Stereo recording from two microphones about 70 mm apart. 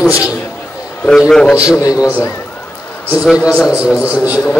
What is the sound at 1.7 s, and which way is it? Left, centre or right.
Speech, left.